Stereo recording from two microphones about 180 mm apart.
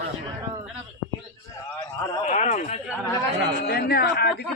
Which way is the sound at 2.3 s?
40° left (ahead or behind).